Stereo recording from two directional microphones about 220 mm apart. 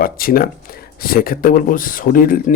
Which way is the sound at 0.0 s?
40° left (ahead or behind).